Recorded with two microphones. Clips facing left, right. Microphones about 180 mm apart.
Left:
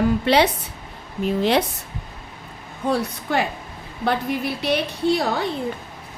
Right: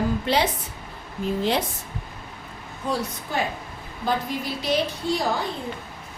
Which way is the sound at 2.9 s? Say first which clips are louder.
Left 5 dB; 65° left (ahead or behind).